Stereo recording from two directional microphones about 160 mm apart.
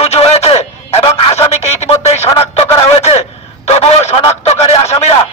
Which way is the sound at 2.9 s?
40° left (ahead or behind).